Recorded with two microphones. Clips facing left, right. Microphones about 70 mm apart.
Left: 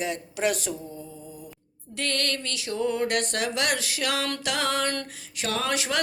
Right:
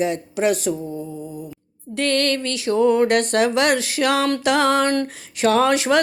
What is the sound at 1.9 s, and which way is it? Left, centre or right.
Music, right.